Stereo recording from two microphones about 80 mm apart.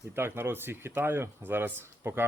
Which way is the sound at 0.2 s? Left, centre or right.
Right.